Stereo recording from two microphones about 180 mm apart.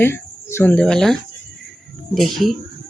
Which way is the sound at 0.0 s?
15° left (ahead or behind).